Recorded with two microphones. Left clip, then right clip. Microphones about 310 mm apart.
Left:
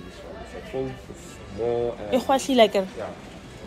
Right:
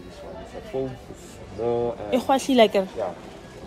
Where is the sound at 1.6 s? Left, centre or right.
Right.